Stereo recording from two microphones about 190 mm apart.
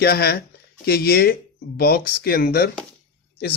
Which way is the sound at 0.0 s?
55° left (ahead or behind).